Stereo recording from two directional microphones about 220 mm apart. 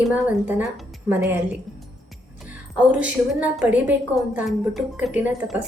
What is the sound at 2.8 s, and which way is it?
A woman's voice, 5° right (ahead or behind).